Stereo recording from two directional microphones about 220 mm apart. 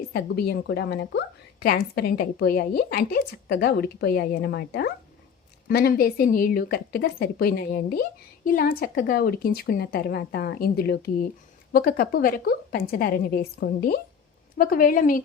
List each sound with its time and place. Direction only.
0.1 s a woman's voice: 45° left (ahead or behind)